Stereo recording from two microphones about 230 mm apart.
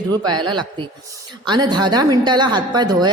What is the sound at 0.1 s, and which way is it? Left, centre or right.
A woman's voice, centre.